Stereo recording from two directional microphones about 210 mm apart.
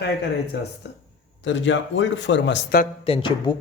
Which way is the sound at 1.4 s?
60° left (ahead or behind).